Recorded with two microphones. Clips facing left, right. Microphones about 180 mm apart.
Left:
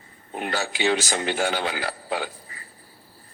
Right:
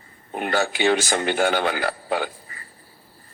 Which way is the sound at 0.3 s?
55° right (ahead or behind).